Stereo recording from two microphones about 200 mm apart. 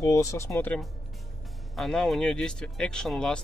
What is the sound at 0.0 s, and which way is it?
Speech, 15° left (ahead or behind).